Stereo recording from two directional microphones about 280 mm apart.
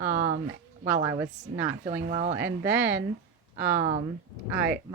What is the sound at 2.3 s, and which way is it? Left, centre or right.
Speech, centre.